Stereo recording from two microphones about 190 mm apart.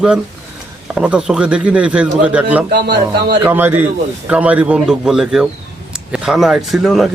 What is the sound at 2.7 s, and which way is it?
Speech, 60° right (ahead or behind).